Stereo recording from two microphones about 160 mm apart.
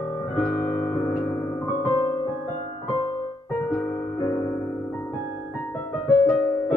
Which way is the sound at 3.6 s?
15° left (ahead or behind).